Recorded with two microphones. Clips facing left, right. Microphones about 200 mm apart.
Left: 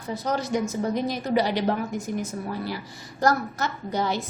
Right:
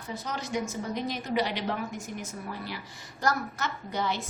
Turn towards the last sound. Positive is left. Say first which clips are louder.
# left 5 dB
turn(degrees=40)  # may be behind; listen again after turning